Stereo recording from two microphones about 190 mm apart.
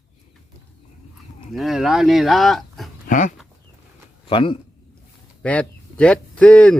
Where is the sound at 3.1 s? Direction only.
40° left (ahead or behind).